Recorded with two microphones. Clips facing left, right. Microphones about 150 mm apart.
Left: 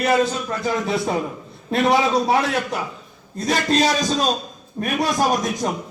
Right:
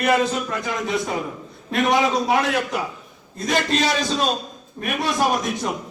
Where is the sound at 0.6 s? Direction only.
35° left (ahead or behind).